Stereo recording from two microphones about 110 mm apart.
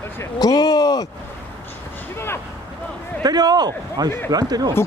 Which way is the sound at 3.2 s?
40° right (ahead or behind).